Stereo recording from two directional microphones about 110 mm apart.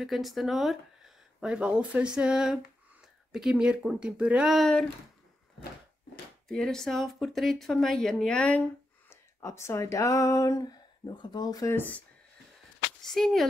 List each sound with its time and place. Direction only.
0.0 s speech: centre (ahead or behind)
6.5 s speech: 5° left (ahead or behind)
9.1 s speech: 25° left (ahead or behind)
11.7 s speech: 15° left (ahead or behind)
13.0 s speech: 5° left (ahead or behind)